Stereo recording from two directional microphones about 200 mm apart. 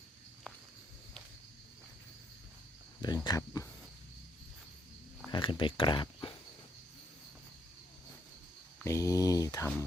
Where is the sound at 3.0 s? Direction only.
20° left (ahead or behind).